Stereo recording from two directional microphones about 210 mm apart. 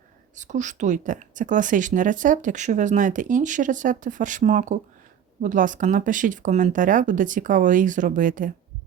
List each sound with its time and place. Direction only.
0.3 s a woman's voice: 35° right (ahead or behind)